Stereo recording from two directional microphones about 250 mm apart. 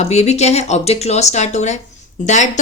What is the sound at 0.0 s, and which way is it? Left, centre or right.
Speech, left.